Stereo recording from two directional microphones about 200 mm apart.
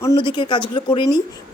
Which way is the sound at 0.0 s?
20° left (ahead or behind).